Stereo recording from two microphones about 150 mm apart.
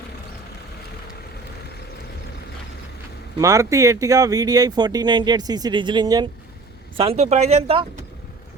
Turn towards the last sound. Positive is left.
turn(degrees=-40)  # may be behind; listen again after turning